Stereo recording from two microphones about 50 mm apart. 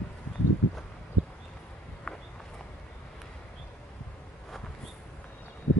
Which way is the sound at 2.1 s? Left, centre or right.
Centre.